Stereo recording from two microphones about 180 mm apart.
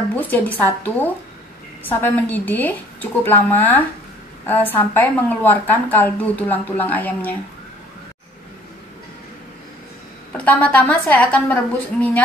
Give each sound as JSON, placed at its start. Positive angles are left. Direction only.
{"t": 0.1, "sound": "a woman's voice", "side_deg": 10}
{"t": 10.3, "sound": "a woman's voice", "side_deg": 5}